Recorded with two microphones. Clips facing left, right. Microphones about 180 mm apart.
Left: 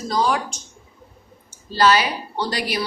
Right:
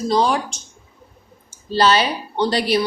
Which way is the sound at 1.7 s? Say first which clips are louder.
Right 1 dB; 25° right (ahead or behind).